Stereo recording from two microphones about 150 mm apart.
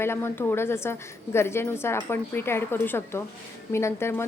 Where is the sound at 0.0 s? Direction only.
15° left (ahead or behind).